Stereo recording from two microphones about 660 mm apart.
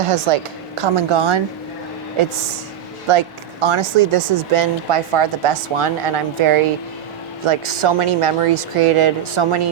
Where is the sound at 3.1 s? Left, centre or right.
Right.